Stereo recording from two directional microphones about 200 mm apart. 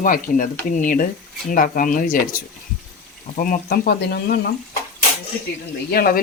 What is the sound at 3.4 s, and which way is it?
Speech, 45° left (ahead or behind).